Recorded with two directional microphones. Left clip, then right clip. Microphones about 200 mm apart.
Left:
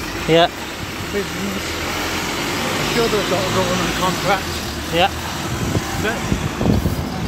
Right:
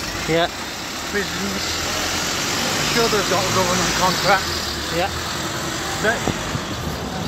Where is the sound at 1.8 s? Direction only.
45° right (ahead or behind).